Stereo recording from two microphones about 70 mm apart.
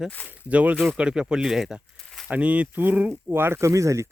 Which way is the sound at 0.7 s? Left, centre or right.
Centre.